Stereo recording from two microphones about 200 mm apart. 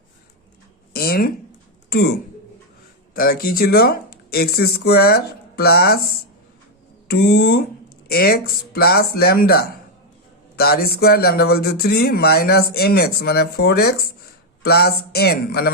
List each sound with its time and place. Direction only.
0.9 s a sound: 50° left (ahead or behind)
3.2 s speech: 45° left (ahead or behind)
7.1 s speech: 50° left (ahead or behind)